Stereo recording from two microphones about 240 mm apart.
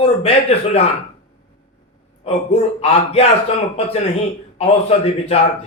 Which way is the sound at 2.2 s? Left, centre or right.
Left.